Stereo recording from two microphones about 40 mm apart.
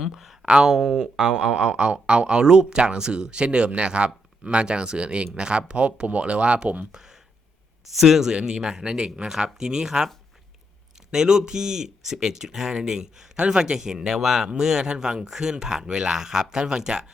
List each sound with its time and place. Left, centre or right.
0.0 s speech: centre; by 6.8 s right
6.9 s a sound: centre
7.9 s speech: centre
11.1 s speech: centre